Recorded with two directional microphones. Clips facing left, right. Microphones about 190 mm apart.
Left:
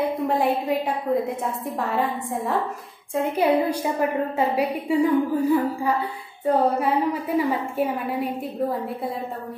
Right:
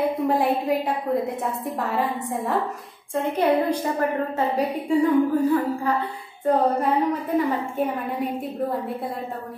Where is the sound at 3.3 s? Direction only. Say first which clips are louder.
Even; 10° left (ahead or behind).